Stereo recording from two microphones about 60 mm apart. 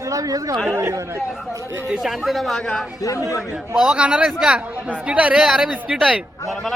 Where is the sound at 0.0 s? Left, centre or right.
Right.